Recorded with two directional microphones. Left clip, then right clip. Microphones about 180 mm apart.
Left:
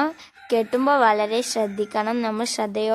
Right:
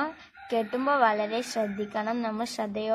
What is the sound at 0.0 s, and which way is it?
A woman's voice, 75° left (ahead or behind).